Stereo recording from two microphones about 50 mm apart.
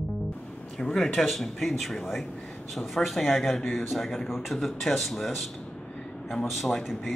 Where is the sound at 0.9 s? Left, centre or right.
Centre.